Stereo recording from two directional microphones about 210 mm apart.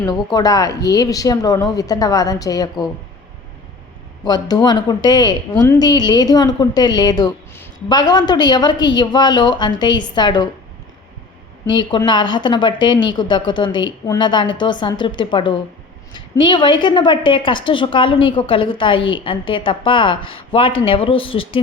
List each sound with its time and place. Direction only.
0.0 s a woman's voice: 20° left (ahead or behind)
4.2 s a woman's voice: 20° left (ahead or behind)
11.6 s a woman's voice: 20° left (ahead or behind)